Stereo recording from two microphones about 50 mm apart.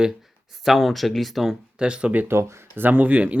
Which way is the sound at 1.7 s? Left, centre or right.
Centre.